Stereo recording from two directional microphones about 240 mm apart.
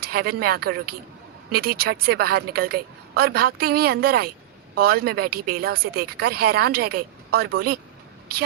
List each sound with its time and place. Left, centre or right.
0.0 s speech: right